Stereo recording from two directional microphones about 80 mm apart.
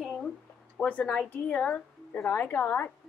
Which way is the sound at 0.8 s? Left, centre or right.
Centre.